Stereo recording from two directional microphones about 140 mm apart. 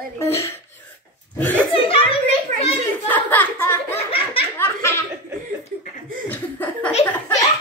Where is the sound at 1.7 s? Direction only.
40° left (ahead or behind).